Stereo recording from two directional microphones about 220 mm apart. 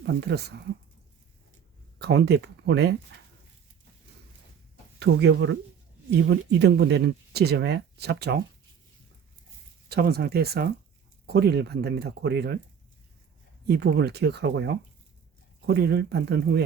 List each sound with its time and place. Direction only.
0.0 s speech: 50° right (ahead or behind)
2.0 s speech: 50° right (ahead or behind)
4.9 s speech: 50° right (ahead or behind)
9.9 s speech: 45° right (ahead or behind)
13.7 s speech: 50° right (ahead or behind)